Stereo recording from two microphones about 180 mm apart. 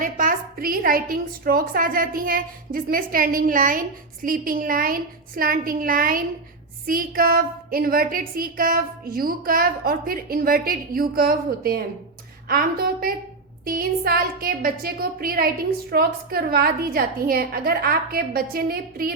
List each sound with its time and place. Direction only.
0.0 s a woman's voice: 50° right (ahead or behind)